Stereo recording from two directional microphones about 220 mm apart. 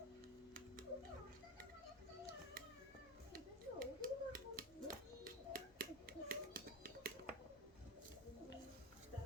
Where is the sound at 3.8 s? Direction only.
40° right (ahead or behind).